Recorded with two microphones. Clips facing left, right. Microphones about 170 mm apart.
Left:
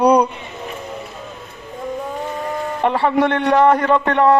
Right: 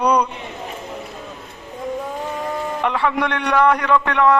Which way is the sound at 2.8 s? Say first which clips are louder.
Left 5 dB; 35° left (ahead or behind).